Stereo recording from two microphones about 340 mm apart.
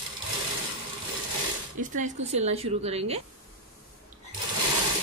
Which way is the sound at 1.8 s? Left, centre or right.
Right.